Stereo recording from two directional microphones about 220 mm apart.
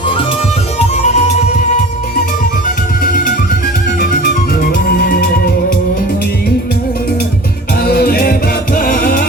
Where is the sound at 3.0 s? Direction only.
40° left (ahead or behind).